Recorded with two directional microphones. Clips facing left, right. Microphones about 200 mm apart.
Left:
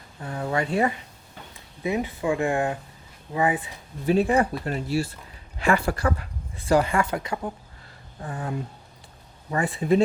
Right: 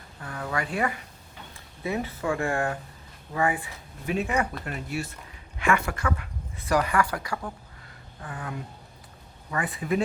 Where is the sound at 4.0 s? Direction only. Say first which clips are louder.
Left 6 dB; 35° left (ahead or behind).